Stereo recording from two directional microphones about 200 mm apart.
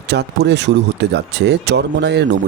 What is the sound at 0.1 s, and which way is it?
Speech, 60° right (ahead or behind).